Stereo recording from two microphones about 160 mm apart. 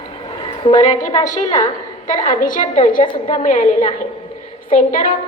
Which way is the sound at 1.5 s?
50° left (ahead or behind).